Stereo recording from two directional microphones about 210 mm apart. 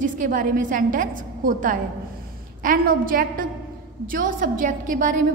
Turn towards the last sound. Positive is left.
turn(degrees=-40)  # may be behind; listen again after turning